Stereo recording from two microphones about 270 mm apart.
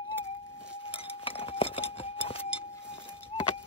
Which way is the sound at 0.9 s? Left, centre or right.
Left.